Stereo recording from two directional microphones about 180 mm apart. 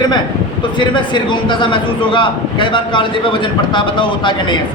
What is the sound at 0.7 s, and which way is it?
A man's voice, 25° left (ahead or behind).